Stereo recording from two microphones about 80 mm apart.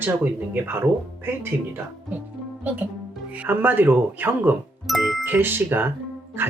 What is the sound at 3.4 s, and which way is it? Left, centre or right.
Speech, right.